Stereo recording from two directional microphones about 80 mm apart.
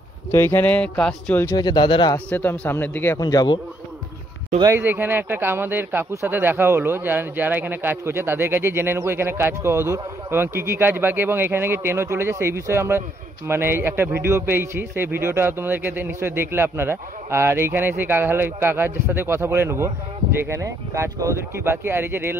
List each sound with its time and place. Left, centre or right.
0.3 s speech: left
0.7 s speech: centre
1.5 s speech: left
2.1 s speech: left
3.2 s speech: left
4.6 s a man's voice: right